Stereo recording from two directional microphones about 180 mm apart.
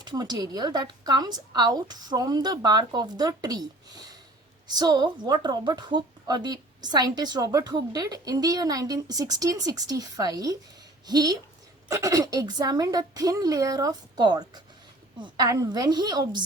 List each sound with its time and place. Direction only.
0.0 s a woman's voice: 20° right (ahead or behind)